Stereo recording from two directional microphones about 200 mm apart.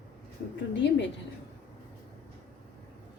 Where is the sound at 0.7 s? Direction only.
65° left (ahead or behind).